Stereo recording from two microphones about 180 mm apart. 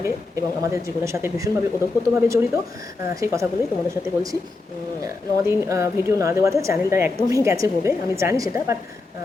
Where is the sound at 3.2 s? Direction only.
15° right (ahead or behind).